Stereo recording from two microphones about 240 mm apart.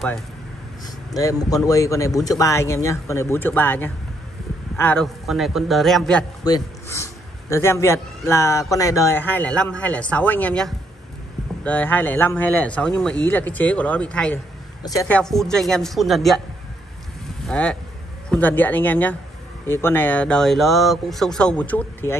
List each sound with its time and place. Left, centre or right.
1.1 s speech: centre
6.4 s speech: centre
17.5 s speech: centre